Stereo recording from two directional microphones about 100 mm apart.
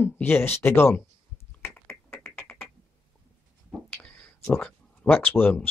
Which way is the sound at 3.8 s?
20° left (ahead or behind).